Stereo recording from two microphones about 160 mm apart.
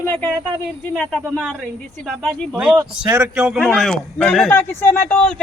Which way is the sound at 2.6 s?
5° right (ahead or behind).